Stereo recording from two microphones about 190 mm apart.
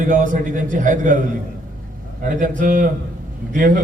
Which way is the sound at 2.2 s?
45° right (ahead or behind).